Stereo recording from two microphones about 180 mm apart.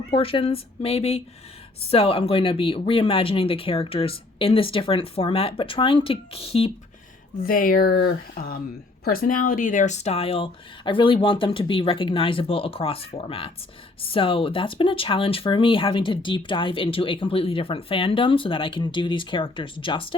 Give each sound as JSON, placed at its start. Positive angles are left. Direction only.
{"t": 0.1, "sound": "speech", "side_deg": 30}
{"t": 7.3, "sound": "speech", "side_deg": 55}